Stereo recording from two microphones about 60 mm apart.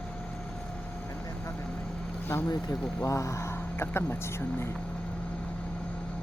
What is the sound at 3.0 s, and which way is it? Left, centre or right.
Speech, left.